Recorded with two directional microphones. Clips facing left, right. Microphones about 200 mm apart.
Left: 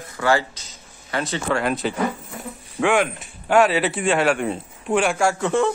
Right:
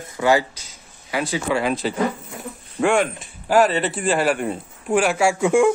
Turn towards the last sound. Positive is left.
turn(degrees=-10)  # may be behind; listen again after turning